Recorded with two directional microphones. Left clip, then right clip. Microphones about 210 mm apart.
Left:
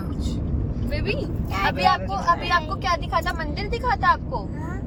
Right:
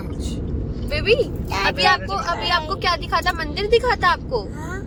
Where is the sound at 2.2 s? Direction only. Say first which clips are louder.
Even; 15° right (ahead or behind).